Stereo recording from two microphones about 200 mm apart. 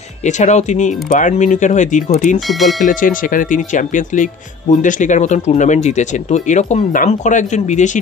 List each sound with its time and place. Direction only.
0.2 s speech: 35° left (ahead or behind)